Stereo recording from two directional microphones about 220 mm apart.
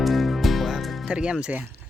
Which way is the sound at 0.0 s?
Centre (ahead or behind).